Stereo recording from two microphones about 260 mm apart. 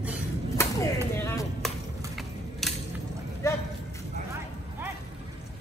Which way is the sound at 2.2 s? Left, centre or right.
Centre.